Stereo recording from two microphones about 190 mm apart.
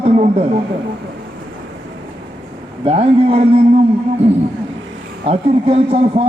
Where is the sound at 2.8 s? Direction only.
30° right (ahead or behind).